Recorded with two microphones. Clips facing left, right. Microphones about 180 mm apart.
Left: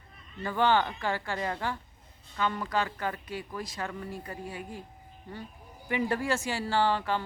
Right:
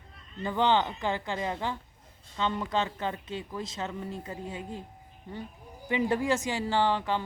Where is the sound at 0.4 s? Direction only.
20° right (ahead or behind).